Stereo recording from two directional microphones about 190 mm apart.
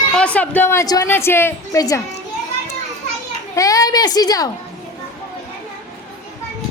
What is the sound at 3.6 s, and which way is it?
Speech, 20° left (ahead or behind).